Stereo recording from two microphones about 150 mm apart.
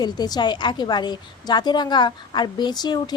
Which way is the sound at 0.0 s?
30° left (ahead or behind).